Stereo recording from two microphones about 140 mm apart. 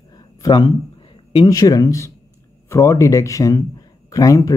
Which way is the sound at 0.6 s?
45° left (ahead or behind).